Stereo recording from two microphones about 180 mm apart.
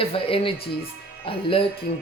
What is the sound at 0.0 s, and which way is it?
Speech, 30° left (ahead or behind).